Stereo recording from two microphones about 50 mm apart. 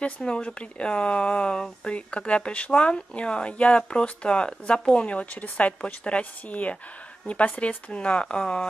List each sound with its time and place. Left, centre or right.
0.0 s speech: centre